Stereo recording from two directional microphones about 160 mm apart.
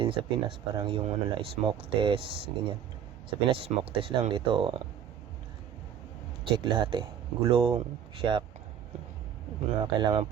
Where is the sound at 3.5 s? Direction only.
35° right (ahead or behind).